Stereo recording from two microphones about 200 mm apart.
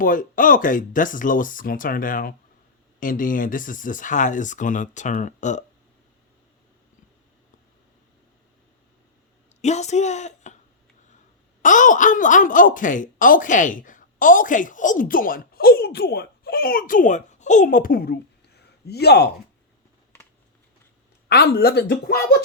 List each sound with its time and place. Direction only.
0.0 s a woman's voice: 40° left (ahead or behind)
9.6 s a woman's voice: 35° left (ahead or behind)
11.6 s a woman's voice: 40° left (ahead or behind)
21.2 s speech: 50° left (ahead or behind)